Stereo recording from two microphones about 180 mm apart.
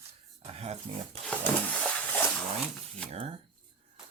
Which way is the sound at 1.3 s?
5° left (ahead or behind).